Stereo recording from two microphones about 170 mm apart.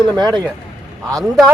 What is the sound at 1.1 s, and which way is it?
Speech, 5° left (ahead or behind).